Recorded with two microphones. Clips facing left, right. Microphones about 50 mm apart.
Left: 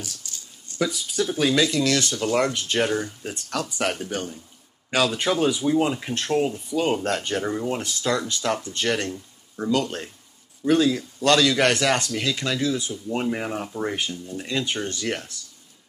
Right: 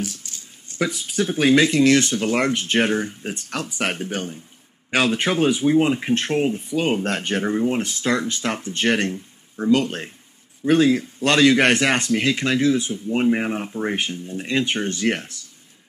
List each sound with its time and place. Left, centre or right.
0.0 s speech: right